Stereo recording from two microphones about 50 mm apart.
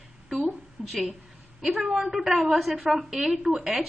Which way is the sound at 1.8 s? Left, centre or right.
Centre.